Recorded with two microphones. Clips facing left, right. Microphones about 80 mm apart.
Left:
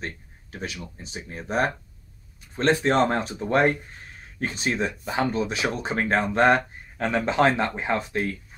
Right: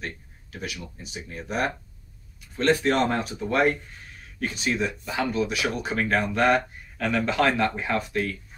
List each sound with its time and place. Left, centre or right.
0.0 s speech: left